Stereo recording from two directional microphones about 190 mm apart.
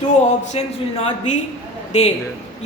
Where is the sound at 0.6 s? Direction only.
30° left (ahead or behind).